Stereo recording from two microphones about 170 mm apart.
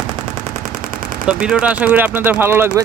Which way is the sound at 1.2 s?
5° right (ahead or behind).